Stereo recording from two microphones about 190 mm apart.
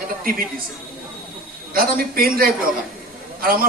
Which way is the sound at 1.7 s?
50° right (ahead or behind).